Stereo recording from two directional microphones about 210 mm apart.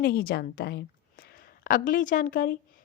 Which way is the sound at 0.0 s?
45° left (ahead or behind).